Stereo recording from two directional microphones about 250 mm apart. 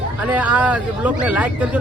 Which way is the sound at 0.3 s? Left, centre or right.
Centre.